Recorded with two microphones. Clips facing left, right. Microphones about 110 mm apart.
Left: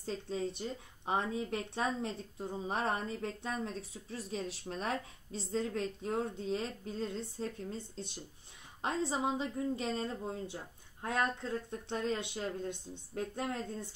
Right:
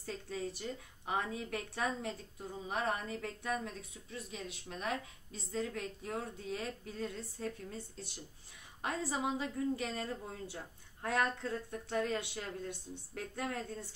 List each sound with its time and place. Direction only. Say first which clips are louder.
0.0 s speech: left 4 dB; 25° left (ahead or behind)